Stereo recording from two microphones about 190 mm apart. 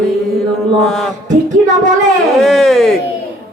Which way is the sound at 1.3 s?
40° right (ahead or behind).